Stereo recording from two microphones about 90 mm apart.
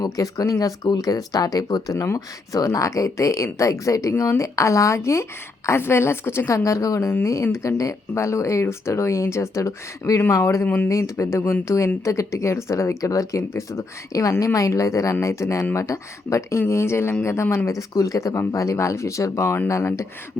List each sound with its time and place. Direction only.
0.0 s speech: 40° left (ahead or behind)